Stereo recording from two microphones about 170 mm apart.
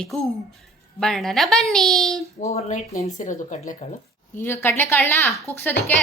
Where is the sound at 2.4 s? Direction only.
45° left (ahead or behind).